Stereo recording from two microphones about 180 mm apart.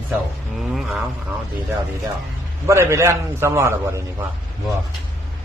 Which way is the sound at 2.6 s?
15° right (ahead or behind).